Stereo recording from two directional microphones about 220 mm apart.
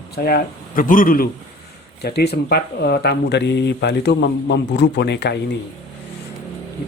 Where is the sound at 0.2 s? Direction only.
45° left (ahead or behind).